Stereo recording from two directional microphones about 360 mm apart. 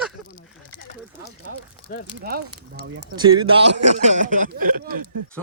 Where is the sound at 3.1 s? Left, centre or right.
Centre.